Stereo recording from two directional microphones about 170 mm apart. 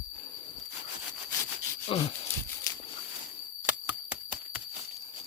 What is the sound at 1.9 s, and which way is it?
Speech, 35° left (ahead or behind).